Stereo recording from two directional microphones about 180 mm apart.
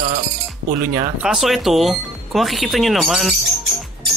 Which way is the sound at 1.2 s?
Centre (ahead or behind).